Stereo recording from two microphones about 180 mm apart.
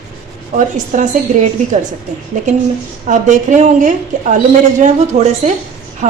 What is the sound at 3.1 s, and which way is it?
A woman's voice, 45° right (ahead or behind).